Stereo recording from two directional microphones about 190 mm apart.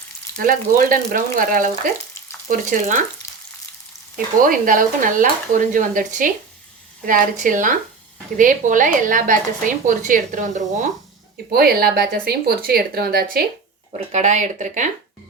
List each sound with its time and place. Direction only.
0.3 s speech: 50° right (ahead or behind)
4.4 s speech: 45° right (ahead or behind)
11.5 s speech: 55° right (ahead or behind)
14.1 s speech: 40° right (ahead or behind)